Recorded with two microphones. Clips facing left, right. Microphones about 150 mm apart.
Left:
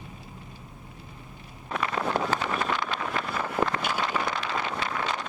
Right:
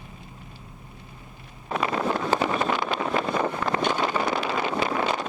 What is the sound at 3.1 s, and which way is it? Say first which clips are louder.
Vehicle: right 6 dB; 20° right (ahead or behind).